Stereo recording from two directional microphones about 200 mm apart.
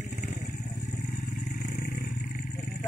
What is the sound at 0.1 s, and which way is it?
Vehicle, 50° left (ahead or behind).